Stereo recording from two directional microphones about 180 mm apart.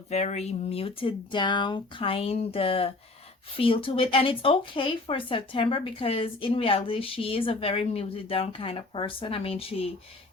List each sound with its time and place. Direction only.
0.1 s speech: 35° left (ahead or behind)